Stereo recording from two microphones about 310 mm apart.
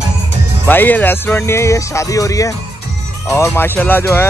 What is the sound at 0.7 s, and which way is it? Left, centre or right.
Speech, centre.